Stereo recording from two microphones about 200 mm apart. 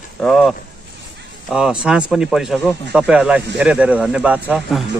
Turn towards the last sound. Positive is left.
turn(degrees=0)  # may be behind; listen again after turning